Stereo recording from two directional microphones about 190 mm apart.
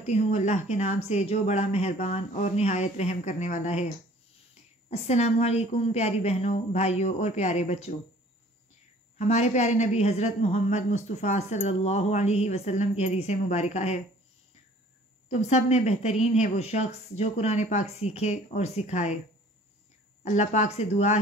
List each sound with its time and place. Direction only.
0.0 s a woman's voice: 35° left (ahead or behind)
9.3 s a woman's voice: 35° left (ahead or behind)
15.2 s a woman's voice: 35° left (ahead or behind)
20.3 s a woman's voice: 35° left (ahead or behind)